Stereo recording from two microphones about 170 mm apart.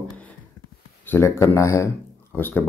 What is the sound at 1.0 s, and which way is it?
Speech, 15° left (ahead or behind).